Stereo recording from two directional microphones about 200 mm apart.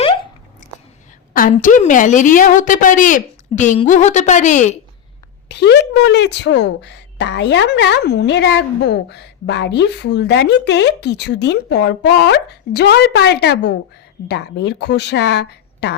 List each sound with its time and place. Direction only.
0.6 s biting: 40° left (ahead or behind)
1.3 s a woman's voice: 45° left (ahead or behind)
5.5 s a woman's voice: 55° left (ahead or behind)